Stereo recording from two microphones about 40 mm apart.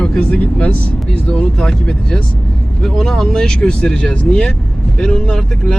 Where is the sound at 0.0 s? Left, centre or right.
Left.